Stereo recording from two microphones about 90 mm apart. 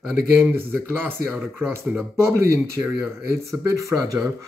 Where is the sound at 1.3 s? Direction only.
Centre (ahead or behind).